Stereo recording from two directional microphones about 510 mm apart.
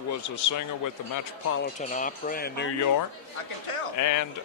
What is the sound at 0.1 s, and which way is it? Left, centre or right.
Speech, left.